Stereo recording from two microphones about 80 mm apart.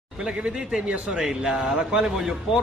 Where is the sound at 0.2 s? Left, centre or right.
Centre.